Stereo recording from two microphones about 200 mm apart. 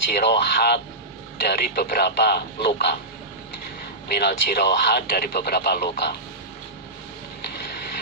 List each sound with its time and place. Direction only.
0.1 s speech: 55° left (ahead or behind)
4.1 s speech: 55° left (ahead or behind)